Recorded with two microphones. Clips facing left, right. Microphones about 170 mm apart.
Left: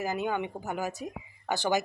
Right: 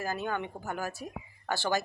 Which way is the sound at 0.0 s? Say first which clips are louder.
Left 3 dB; 15° left (ahead or behind).